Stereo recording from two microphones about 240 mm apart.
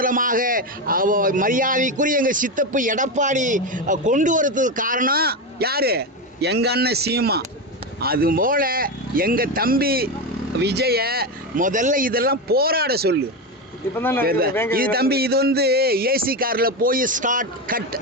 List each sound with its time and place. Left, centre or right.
0.0 s a man's voice: right
13.9 s speech: centre
14.3 s a man's voice: right